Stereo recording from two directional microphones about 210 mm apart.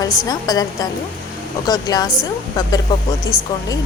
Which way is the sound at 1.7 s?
15° left (ahead or behind).